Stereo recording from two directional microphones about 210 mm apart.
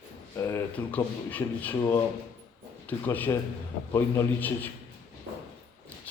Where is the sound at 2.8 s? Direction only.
10° left (ahead or behind).